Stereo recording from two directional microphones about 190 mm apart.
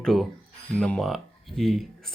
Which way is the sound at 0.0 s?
Centre (ahead or behind).